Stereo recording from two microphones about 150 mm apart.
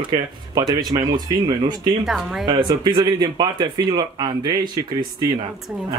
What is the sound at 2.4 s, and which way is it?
Speech, 30° right (ahead or behind).